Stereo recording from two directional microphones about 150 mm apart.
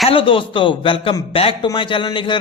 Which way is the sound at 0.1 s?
35° left (ahead or behind).